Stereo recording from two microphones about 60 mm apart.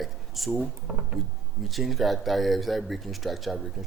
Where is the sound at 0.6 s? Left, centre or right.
Centre.